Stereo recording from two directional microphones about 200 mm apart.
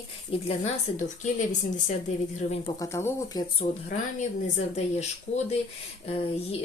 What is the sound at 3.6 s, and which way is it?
Speech, 40° left (ahead or behind).